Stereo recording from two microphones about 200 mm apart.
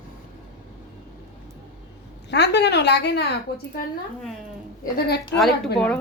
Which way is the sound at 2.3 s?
60° left (ahead or behind).